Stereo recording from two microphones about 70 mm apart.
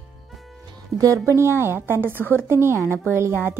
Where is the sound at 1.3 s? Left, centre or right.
Right.